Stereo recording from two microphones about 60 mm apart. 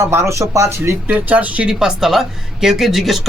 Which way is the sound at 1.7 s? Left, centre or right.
Centre.